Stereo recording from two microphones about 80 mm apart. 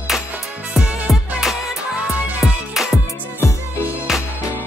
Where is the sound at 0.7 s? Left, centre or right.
Centre.